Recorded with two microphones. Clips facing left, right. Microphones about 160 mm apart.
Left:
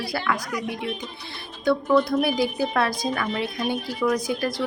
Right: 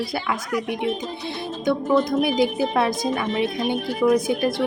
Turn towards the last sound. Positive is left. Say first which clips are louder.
# right 5 dB
turn(degrees=-25)  # may be behind; listen again after turning